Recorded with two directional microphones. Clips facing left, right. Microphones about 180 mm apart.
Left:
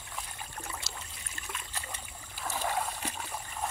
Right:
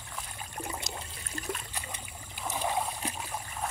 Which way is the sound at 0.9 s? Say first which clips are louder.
Right 6 dB; 35° right (ahead or behind).